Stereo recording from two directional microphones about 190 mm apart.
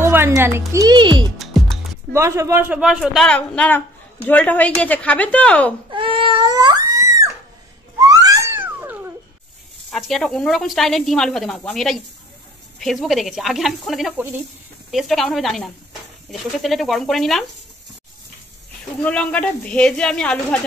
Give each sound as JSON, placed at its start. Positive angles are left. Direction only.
{"t": 0.0, "sound": "speech", "side_deg": -15}
{"t": 1.4, "sound": "music", "side_deg": 0}
{"t": 2.1, "sound": "speech", "side_deg": -15}
{"t": 5.9, "sound": "crying", "side_deg": -25}
{"t": 8.1, "sound": "cat", "side_deg": -20}
{"t": 9.8, "sound": "speech", "side_deg": 0}
{"t": 19.0, "sound": "speech", "side_deg": 5}